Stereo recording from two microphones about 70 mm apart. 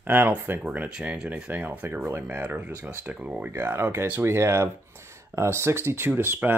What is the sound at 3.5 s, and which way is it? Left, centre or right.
Speech, right.